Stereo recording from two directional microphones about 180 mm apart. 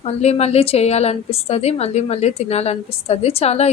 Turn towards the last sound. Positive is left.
turn(degrees=35)  # may be behind; listen again after turning